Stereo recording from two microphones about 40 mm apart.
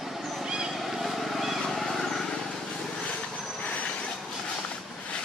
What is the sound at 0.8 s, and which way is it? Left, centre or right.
Vehicle, centre.